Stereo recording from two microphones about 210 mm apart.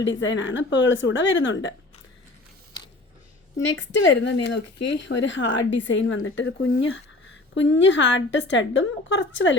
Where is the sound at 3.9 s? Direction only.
55° left (ahead or behind).